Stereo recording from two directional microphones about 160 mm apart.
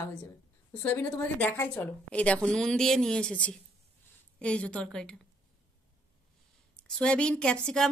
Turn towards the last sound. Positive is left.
turn(degrees=5)  # may be behind; listen again after turning